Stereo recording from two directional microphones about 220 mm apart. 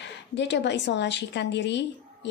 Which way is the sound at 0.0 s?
55° left (ahead or behind).